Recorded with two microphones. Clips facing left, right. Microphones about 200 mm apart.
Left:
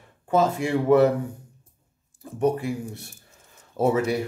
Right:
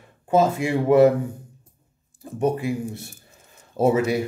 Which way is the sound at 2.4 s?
5° right (ahead or behind).